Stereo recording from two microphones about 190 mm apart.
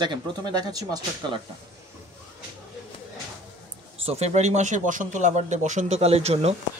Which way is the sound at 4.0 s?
35° right (ahead or behind).